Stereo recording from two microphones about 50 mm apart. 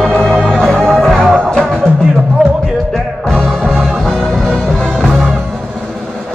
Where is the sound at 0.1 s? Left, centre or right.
Centre.